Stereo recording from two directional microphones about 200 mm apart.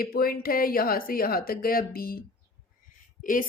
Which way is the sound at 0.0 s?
50° left (ahead or behind).